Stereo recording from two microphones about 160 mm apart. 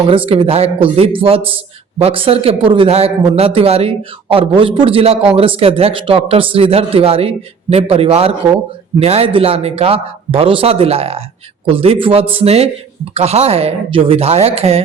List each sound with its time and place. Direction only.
0.3 s a man's voice: 35° right (ahead or behind)